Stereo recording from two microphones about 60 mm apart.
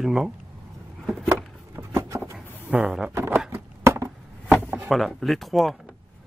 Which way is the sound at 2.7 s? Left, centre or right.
Centre.